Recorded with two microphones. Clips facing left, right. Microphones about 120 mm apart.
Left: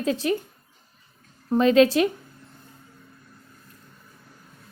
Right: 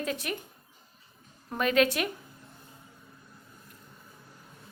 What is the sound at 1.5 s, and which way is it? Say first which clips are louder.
Speech: left 8 dB; 30° left (ahead or behind).